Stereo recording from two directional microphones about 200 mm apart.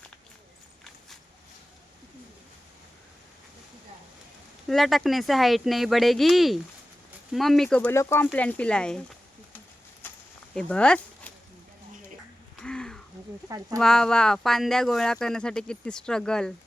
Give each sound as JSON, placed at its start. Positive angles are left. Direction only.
{"t": 4.7, "sound": "speech", "side_deg": 0}
{"t": 10.5, "sound": "speech", "side_deg": 5}
{"t": 12.5, "sound": "a sound", "side_deg": 5}
{"t": 13.7, "sound": "speech", "side_deg": 5}